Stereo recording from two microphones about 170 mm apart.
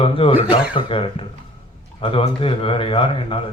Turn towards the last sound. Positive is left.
turn(degrees=30)  # may be behind; listen again after turning